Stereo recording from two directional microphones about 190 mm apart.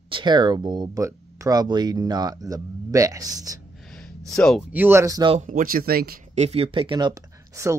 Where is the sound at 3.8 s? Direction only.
5° left (ahead or behind).